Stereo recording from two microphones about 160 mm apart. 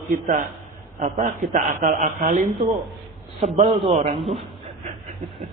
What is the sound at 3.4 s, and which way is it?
Speech, 35° right (ahead or behind).